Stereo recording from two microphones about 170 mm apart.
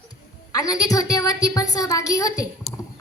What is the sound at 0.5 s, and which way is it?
A woman's voice, 20° left (ahead or behind).